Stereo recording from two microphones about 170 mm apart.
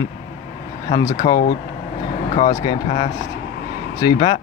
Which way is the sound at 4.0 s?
25° left (ahead or behind).